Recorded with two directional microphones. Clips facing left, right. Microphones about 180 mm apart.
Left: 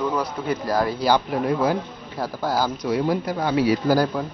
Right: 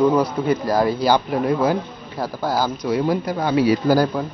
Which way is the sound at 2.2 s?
30° right (ahead or behind).